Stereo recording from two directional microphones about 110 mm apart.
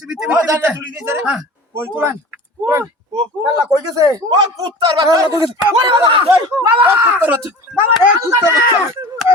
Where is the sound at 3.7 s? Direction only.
30° right (ahead or behind); by 6.2 s 50° right (ahead or behind).